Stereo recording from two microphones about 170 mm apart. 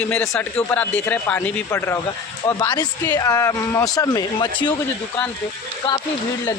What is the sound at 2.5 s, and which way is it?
A man's voice, 25° left (ahead or behind).